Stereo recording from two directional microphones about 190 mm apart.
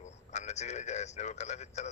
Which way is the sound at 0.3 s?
35° left (ahead or behind).